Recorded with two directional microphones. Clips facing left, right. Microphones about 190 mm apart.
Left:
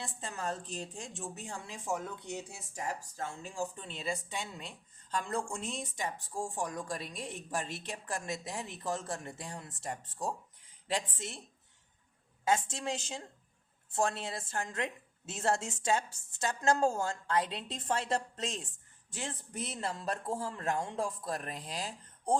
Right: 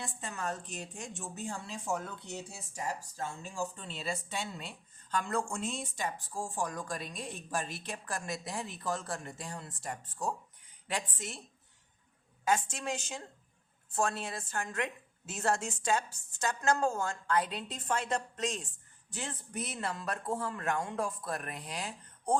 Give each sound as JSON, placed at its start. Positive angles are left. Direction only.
{"t": 0.0, "sound": "a woman's voice", "side_deg": 30}
{"t": 12.7, "sound": "a woman's voice", "side_deg": 25}